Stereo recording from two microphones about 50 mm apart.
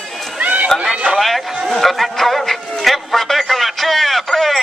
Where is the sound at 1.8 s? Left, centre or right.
Centre.